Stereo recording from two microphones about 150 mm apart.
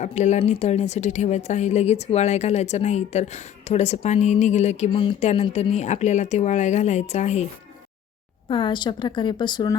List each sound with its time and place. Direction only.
0.0 s speech: 50° left (ahead or behind)
8.4 s a woman's voice: 35° left (ahead or behind)